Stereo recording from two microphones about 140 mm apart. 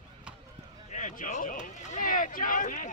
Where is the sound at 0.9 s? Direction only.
60° left (ahead or behind).